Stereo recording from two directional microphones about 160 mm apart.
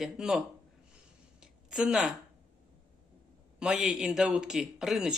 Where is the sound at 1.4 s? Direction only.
5° right (ahead or behind).